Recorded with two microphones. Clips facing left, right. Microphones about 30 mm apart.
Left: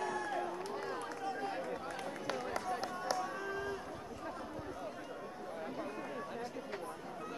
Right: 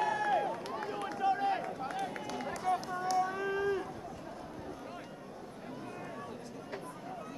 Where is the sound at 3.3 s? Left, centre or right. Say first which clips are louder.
Right 6 dB; centre.